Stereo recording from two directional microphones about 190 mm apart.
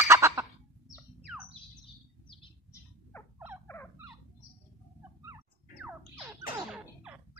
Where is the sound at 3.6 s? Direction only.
10° left (ahead or behind).